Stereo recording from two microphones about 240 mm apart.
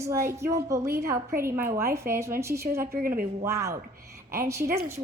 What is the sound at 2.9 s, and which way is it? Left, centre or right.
Speech, right.